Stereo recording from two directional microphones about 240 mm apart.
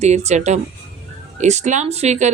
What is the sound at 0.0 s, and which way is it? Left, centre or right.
A woman's voice, right.